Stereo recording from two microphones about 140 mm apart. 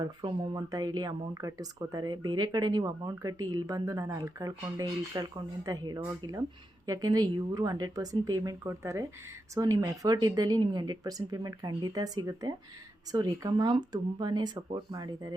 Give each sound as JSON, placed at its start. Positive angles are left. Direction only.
{"t": 0.0, "sound": "speech", "side_deg": -35}